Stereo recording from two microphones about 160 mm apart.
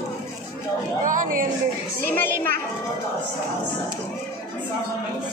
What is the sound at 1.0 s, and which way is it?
Speech, 55° right (ahead or behind).